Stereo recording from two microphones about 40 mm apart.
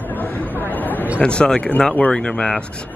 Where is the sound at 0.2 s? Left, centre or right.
Left.